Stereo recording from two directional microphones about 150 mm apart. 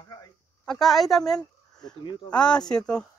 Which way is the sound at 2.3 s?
5° left (ahead or behind).